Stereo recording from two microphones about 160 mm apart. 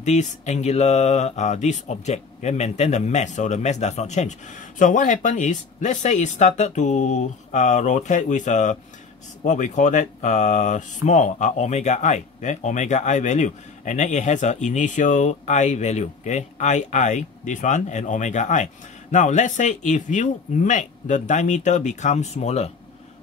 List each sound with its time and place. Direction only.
0.0 s speech: 50° left (ahead or behind)